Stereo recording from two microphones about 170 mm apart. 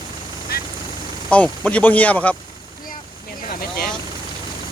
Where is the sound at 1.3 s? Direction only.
5° left (ahead or behind).